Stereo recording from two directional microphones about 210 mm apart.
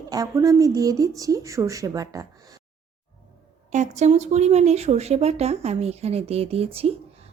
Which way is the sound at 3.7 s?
35° right (ahead or behind).